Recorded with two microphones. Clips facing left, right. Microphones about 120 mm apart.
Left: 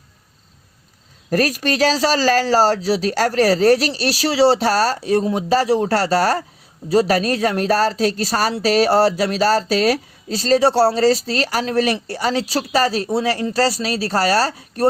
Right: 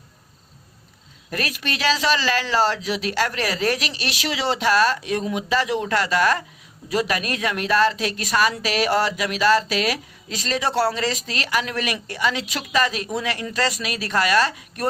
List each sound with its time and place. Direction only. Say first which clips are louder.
1.3 s a woman's voice: left 9 dB; 40° left (ahead or behind)